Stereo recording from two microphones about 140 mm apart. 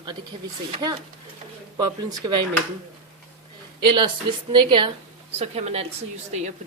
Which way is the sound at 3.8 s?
35° right (ahead or behind).